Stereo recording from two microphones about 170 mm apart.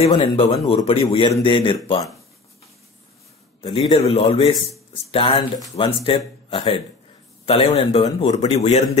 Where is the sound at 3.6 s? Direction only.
30° left (ahead or behind).